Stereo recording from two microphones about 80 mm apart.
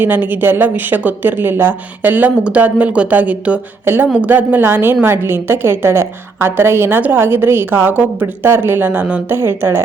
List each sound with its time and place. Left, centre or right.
0.0 s a woman's voice: right
3.8 s a woman's voice: right
9.4 s a woman's voice: right